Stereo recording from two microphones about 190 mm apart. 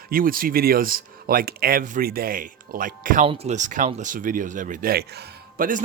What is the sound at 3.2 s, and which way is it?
Speech, 30° right (ahead or behind).